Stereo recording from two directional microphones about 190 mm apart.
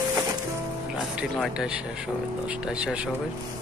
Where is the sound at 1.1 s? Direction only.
Centre (ahead or behind).